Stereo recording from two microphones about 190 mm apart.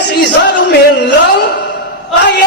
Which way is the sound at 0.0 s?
60° left (ahead or behind).